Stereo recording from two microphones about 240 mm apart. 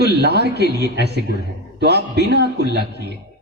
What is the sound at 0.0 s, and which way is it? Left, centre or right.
A man's voice, right.